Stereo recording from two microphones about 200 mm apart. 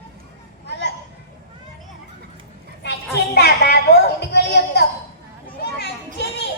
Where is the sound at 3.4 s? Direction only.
55° left (ahead or behind).